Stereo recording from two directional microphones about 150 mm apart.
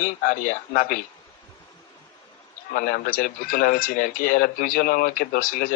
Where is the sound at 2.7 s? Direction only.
75° left (ahead or behind).